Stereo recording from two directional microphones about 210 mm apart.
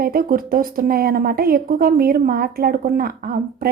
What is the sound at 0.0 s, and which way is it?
A woman's voice, 45° right (ahead or behind).